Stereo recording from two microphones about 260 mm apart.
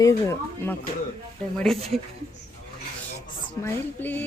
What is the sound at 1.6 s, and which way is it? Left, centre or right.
Speech, centre.